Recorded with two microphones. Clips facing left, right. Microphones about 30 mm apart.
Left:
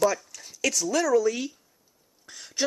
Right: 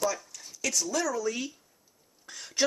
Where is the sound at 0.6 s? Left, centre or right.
Left.